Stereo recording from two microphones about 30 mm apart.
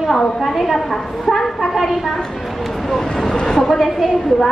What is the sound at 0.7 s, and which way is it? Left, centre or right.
Speech, centre.